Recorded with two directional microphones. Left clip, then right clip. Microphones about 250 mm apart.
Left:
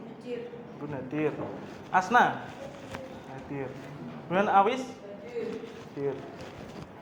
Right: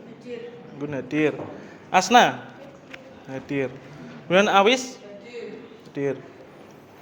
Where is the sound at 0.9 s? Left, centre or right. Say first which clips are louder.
Right 7 dB; right.